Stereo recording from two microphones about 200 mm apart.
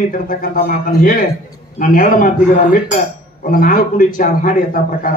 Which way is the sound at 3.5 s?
45° left (ahead or behind).